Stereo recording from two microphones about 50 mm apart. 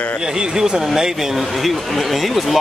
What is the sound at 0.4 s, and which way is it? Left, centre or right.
Speech, centre.